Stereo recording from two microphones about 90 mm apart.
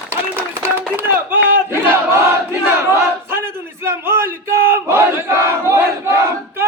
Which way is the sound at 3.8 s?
25° right (ahead or behind).